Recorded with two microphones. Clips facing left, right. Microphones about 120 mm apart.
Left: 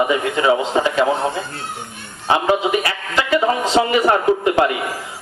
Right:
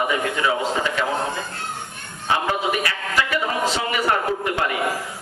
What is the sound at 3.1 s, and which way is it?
Speech, 25° left (ahead or behind).